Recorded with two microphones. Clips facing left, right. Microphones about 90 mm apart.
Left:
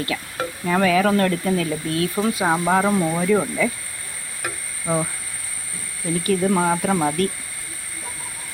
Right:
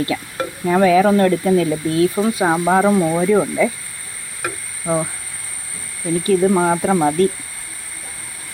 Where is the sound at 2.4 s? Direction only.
10° right (ahead or behind).